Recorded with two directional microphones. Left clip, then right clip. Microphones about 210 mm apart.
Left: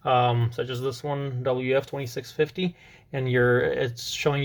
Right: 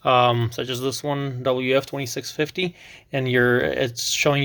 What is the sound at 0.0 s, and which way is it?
Speech, 45° right (ahead or behind).